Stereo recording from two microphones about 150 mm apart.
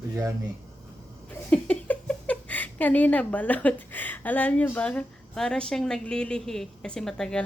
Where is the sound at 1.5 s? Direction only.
10° left (ahead or behind).